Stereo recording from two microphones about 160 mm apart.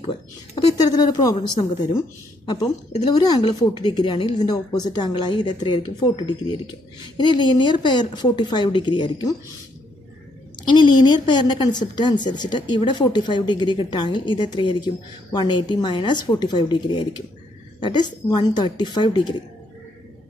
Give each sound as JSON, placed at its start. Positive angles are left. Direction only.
{"t": 0.9, "sound": "a woman's voice", "side_deg": 30}
{"t": 3.1, "sound": "a woman's voice", "side_deg": 25}
{"t": 10.7, "sound": "a woman's voice", "side_deg": 30}